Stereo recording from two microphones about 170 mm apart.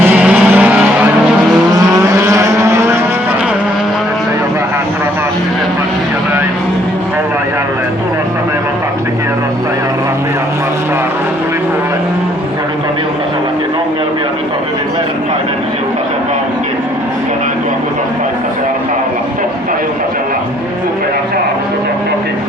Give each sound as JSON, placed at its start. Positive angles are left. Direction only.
{"t": 0.0, "sound": "vehicle", "side_deg": -10}
{"t": 1.9, "sound": "vehicle", "side_deg": -20}